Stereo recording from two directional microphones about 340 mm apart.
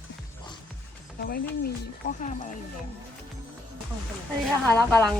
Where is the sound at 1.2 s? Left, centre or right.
Left.